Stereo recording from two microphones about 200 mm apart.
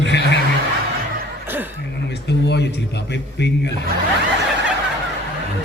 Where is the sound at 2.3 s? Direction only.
55° left (ahead or behind).